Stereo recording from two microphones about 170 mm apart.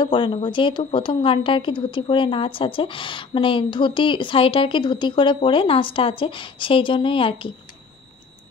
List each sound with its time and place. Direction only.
0.0 s speech: 30° left (ahead or behind)